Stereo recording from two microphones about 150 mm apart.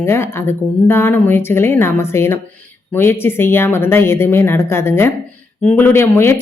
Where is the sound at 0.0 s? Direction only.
15° left (ahead or behind).